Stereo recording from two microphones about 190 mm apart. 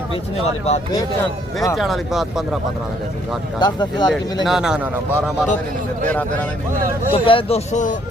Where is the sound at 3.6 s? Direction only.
25° left (ahead or behind).